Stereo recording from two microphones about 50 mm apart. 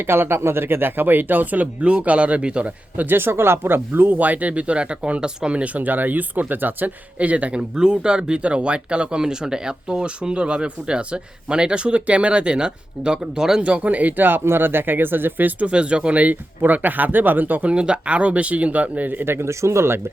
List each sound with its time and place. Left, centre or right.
0.1 s speech: right
3.1 s speech: right
7.8 s speech: centre
13.6 s speech: right
15.6 s speech: right
17.7 s speech: right
19.2 s speech: right
19.5 s speech: right